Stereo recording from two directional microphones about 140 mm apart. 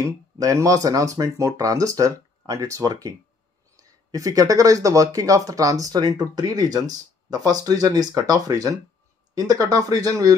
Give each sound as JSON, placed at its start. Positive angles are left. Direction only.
{"t": 0.0, "sound": "speech", "side_deg": -20}